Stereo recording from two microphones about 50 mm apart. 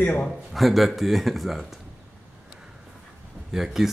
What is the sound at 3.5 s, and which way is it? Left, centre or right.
Speech, centre.